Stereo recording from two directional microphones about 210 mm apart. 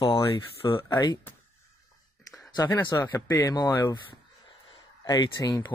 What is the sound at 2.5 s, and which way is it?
Speech, 15° left (ahead or behind).